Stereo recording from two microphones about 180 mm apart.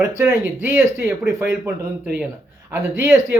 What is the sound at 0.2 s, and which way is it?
A man's voice, 15° right (ahead or behind).